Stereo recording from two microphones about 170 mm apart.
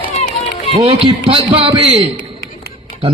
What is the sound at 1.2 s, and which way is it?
Speech, 35° right (ahead or behind).